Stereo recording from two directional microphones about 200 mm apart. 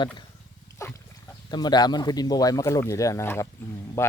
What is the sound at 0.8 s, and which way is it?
Pig, 15° left (ahead or behind).